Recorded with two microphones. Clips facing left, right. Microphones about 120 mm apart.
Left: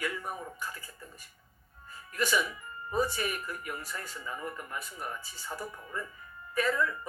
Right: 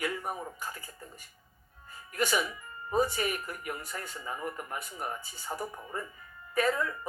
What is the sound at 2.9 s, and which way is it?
Speech, 25° right (ahead or behind).